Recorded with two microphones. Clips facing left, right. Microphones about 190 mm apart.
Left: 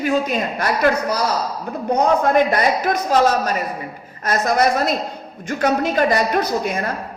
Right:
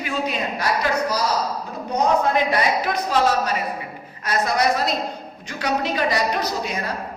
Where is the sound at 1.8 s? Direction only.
50° left (ahead or behind).